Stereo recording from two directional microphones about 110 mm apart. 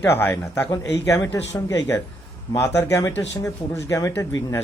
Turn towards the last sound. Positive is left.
turn(degrees=30)  # may be behind; listen again after turning